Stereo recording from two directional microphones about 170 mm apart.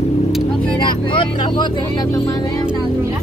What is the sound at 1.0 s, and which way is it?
Speech, 30° left (ahead or behind).